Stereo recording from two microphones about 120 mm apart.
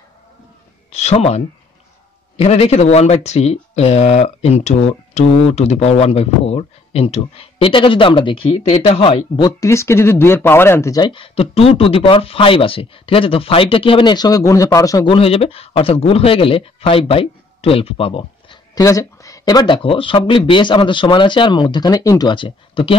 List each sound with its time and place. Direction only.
0.9 s speech: 65° left (ahead or behind)
7.5 s speech: 45° left (ahead or behind)
9.6 s speech: 25° left (ahead or behind)
11.0 s speech: 45° left (ahead or behind); by 15.0 s 30° left (ahead or behind)
15.0 s speech: 50° left (ahead or behind)
18.8 s speech: 30° left (ahead or behind); by 22.9 s 45° left (ahead or behind)